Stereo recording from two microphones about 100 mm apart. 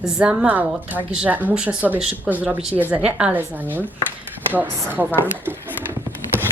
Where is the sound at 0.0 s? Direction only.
10° right (ahead or behind).